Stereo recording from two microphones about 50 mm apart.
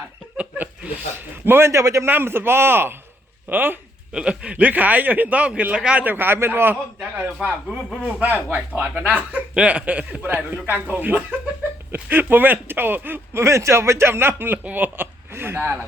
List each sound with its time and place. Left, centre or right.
0.3 s chuckle: right
1.5 s speech: right
1.7 s a man's voice: right
2.0 s speech: right
4.1 s a man's voice: centre
5.7 s speech: right
6.1 s speech: right
7.4 s a man's voice: right
13.3 s speech: right
14.1 s speech: right
14.9 s speech: right